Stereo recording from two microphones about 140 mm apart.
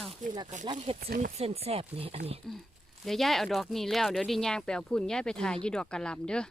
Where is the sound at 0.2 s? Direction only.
60° right (ahead or behind).